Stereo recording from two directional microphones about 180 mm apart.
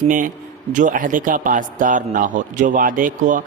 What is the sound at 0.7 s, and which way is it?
A man's voice, 45° right (ahead or behind).